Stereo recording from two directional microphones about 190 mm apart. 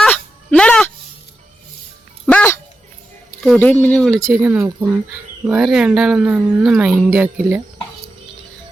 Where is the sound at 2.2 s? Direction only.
10° left (ahead or behind).